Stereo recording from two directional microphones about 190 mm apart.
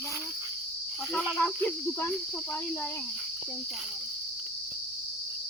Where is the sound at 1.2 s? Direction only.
5° left (ahead or behind).